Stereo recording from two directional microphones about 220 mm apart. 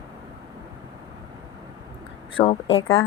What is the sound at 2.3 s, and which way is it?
Speech, 25° left (ahead or behind).